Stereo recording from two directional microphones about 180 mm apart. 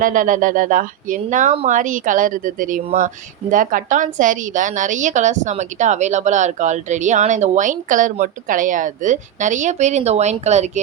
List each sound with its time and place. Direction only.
0.0 s a woman's voice: 45° right (ahead or behind)